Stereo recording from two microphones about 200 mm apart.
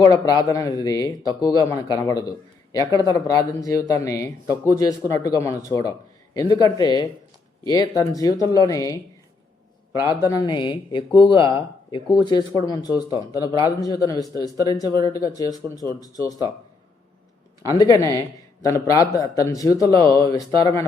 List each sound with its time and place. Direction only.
0.0 s speech: 20° left (ahead or behind)
17.9 s speech: 20° left (ahead or behind)